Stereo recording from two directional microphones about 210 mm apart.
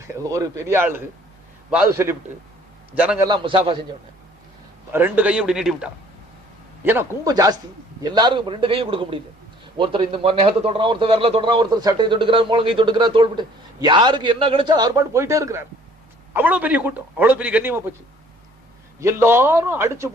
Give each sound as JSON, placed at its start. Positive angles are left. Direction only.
{"t": 0.0, "sound": "a man's voice", "side_deg": -15}
{"t": 3.2, "sound": "a man's voice", "side_deg": -25}
{"t": 4.9, "sound": "a man's voice", "side_deg": -10}
{"t": 18.9, "sound": "a man's voice", "side_deg": -10}